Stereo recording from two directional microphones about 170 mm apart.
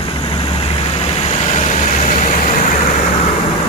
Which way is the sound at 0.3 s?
35° left (ahead or behind).